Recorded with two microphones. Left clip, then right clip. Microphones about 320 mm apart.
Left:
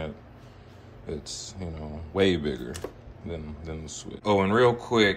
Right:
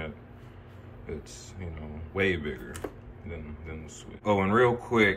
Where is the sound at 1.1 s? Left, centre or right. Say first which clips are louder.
Left 5 dB; centre.